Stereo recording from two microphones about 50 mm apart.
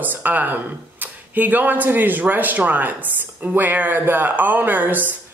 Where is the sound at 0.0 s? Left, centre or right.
Right.